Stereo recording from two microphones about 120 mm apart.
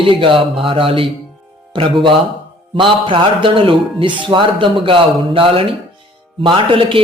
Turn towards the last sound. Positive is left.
turn(degrees=-45)  # may be behind; listen again after turning